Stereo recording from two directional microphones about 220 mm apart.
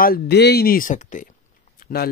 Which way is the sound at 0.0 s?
45° left (ahead or behind).